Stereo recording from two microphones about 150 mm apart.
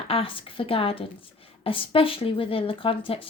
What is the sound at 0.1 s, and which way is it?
Speech, 35° left (ahead or behind).